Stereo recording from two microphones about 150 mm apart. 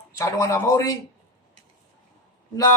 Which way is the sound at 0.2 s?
20° left (ahead or behind).